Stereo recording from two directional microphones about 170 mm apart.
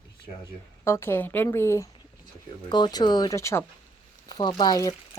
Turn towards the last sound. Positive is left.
turn(degrees=25)  # may be behind; listen again after turning